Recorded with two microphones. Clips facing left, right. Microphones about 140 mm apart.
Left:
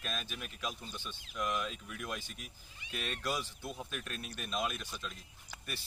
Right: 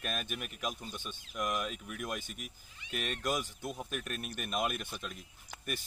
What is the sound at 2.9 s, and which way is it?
Speech, 45° right (ahead or behind).